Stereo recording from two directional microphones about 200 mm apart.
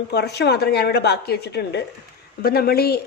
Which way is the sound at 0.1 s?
55° left (ahead or behind).